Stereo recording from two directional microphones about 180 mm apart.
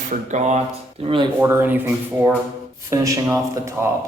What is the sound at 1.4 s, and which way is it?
Speech, 10° right (ahead or behind).